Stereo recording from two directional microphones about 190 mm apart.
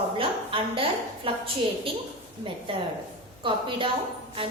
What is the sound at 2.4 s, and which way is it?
A woman's voice, 25° right (ahead or behind).